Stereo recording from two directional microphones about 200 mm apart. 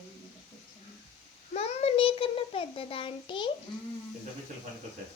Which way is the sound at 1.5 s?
30° left (ahead or behind).